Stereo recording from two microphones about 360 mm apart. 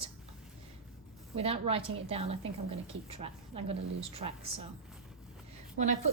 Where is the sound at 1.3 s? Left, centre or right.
Centre.